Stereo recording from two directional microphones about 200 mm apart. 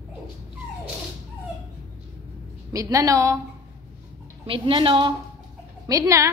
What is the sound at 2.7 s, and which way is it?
Speech, 15° right (ahead or behind).